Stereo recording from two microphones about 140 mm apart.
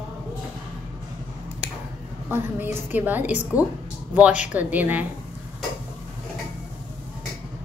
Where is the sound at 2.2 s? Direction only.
15° right (ahead or behind).